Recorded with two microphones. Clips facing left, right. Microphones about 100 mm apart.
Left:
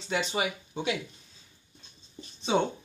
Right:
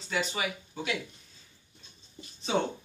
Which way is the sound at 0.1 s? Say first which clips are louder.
Left 2 dB; 30° left (ahead or behind).